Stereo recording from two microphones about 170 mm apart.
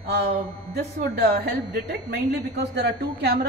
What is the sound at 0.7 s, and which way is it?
A woman's voice, 70° right (ahead or behind).